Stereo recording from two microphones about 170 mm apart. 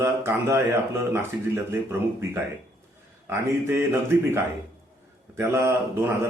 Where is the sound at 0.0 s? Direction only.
15° right (ahead or behind).